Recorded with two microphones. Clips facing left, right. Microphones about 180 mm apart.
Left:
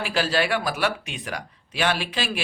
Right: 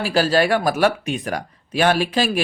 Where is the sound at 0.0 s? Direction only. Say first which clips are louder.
Right 6 dB; 40° right (ahead or behind).